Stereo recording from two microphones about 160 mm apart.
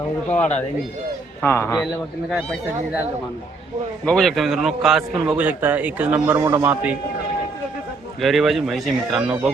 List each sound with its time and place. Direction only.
0.3 s speech: 10° left (ahead or behind)
4.0 s a man's voice: 5° left (ahead or behind); by 6.9 s 15° right (ahead or behind)
8.2 s a man's voice: centre (ahead or behind)